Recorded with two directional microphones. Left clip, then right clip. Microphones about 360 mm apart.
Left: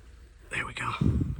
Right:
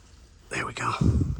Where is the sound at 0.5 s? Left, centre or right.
Centre.